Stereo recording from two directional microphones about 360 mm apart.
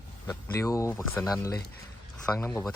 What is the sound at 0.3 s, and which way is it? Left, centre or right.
Speech, centre.